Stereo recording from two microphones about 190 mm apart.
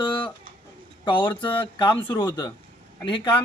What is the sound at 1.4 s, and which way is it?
Speech, 25° left (ahead or behind).